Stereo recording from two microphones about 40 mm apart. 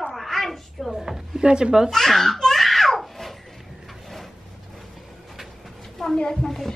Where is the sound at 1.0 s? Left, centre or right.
Centre.